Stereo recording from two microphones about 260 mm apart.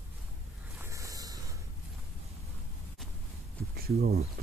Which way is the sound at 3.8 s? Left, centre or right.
Right.